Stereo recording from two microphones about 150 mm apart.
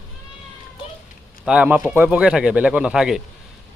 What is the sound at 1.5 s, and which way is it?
Speech, 10° right (ahead or behind).